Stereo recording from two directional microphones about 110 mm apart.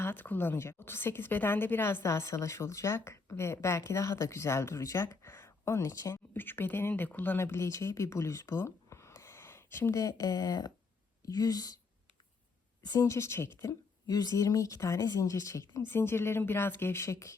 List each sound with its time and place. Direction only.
0.0 s a woman's voice: 20° left (ahead or behind); by 11.7 s 35° left (ahead or behind)
12.9 s a woman's voice: 30° left (ahead or behind)